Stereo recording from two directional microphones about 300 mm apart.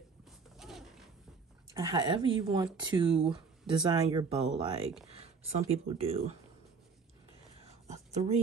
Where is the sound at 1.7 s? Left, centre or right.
Centre.